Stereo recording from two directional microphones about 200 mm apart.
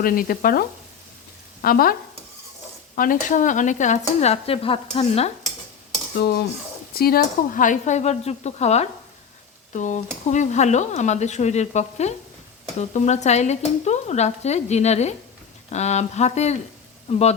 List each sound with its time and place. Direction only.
0.0 s frying: 45° left (ahead or behind)
1.6 s frying: 45° left (ahead or behind)
2.9 s speech: 40° left (ahead or behind)
6.1 s frying: 55° left (ahead or behind)
7.0 s speech: 50° left (ahead or behind); by 17.3 s 30° left (ahead or behind)